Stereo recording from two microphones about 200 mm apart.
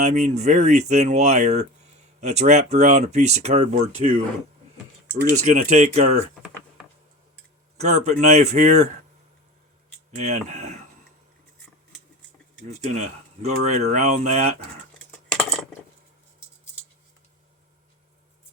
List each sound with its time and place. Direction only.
0.0 s speech: 35° right (ahead or behind)
5.2 s speech: 35° right (ahead or behind)
7.8 s speech: 35° right (ahead or behind)
10.2 s speech: 35° right (ahead or behind)
12.9 s speech: 35° right (ahead or behind)
14.9 s a sound: 5° left (ahead or behind)